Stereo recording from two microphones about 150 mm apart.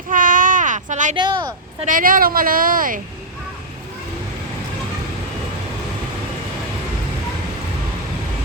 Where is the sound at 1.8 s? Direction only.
65° right (ahead or behind).